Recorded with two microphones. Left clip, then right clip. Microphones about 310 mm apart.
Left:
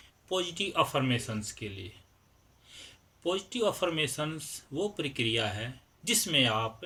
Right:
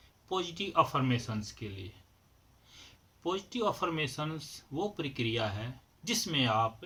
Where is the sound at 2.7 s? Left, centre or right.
Centre.